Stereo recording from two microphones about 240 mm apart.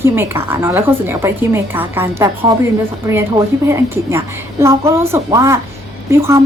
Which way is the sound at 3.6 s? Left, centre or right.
Centre.